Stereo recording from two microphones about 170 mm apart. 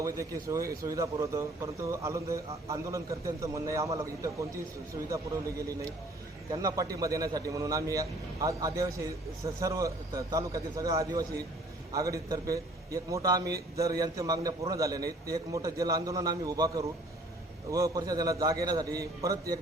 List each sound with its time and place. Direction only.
0.4 s a man's voice: 20° right (ahead or behind)
6.5 s a man's voice: 20° right (ahead or behind)